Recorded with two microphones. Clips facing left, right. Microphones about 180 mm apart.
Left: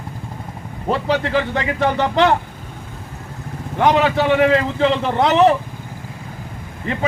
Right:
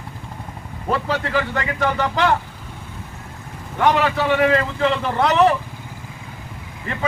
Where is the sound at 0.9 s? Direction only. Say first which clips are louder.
Left 3 dB; 30° left (ahead or behind).